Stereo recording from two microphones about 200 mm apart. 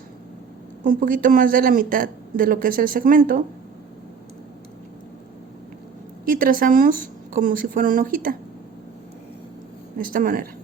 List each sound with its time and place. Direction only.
0.9 s speech: 45° right (ahead or behind)
6.2 s speech: 45° right (ahead or behind)
10.0 s speech: 45° right (ahead or behind)